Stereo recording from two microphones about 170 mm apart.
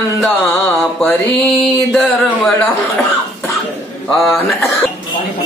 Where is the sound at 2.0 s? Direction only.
Centre (ahead or behind).